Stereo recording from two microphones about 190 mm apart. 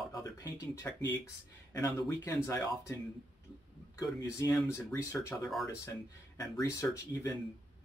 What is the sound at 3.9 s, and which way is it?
Speech, 15° left (ahead or behind).